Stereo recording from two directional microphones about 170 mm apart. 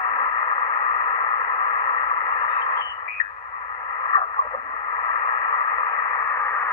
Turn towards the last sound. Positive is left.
turn(degrees=15)  # may be behind; listen again after turning